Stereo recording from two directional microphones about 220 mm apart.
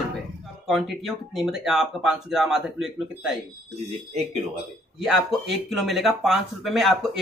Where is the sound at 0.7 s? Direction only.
Centre (ahead or behind).